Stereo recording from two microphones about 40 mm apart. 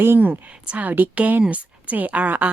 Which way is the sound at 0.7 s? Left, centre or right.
Right.